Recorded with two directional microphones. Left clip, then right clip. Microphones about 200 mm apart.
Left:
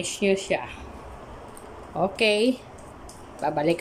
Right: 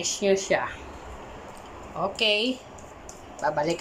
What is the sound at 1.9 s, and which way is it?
Speech, 25° left (ahead or behind).